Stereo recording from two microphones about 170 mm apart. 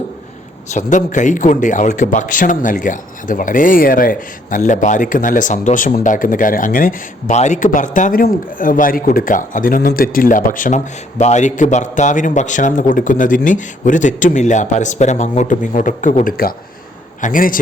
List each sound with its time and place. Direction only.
0.7 s a man's voice: 45° left (ahead or behind)